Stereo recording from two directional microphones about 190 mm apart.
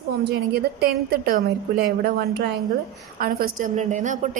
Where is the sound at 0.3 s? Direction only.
55° right (ahead or behind).